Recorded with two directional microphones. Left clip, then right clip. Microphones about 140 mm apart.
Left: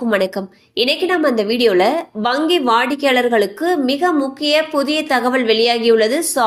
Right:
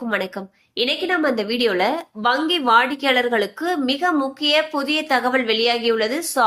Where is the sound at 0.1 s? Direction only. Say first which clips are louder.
Left 6 dB; 40° left (ahead or behind).